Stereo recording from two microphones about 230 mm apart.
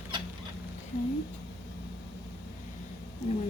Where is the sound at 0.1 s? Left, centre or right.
Centre.